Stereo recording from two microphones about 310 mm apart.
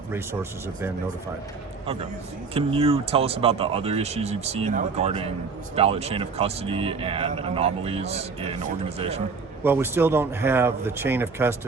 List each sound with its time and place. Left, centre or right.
0.1 s a man's voice: centre
2.5 s a man's voice: centre
9.6 s a man's voice: centre